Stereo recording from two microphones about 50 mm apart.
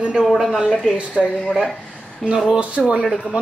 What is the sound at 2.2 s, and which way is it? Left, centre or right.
Speech, centre.